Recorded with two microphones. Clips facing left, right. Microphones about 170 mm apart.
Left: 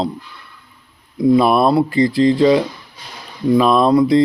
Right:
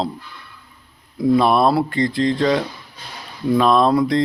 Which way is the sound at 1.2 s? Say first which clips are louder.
Left 3 dB; 5° left (ahead or behind).